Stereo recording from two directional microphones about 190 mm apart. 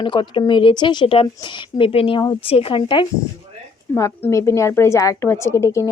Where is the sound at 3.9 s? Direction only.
15° left (ahead or behind).